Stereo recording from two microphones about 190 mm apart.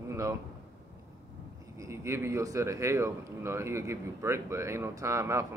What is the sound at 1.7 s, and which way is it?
A man's voice, 15° right (ahead or behind).